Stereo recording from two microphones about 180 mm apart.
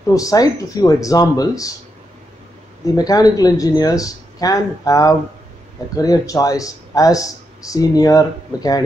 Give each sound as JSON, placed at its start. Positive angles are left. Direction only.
{"t": 0.0, "sound": "speech", "side_deg": 20}
{"t": 3.0, "sound": "speech", "side_deg": 20}